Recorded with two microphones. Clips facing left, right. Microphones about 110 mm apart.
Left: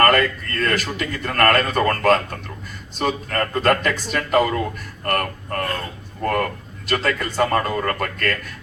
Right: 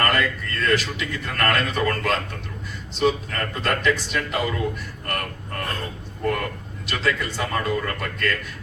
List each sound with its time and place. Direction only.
0.0 s a man's voice: 50° left (ahead or behind)
6.8 s a man's voice: 45° left (ahead or behind)